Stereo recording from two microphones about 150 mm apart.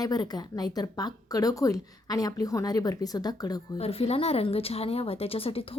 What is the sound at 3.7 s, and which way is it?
Speech, 40° left (ahead or behind).